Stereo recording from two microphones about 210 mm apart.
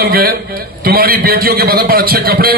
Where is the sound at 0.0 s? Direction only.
45° right (ahead or behind).